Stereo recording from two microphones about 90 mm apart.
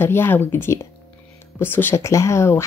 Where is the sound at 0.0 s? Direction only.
25° left (ahead or behind).